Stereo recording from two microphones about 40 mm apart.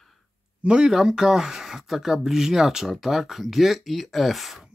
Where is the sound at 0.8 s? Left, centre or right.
Centre.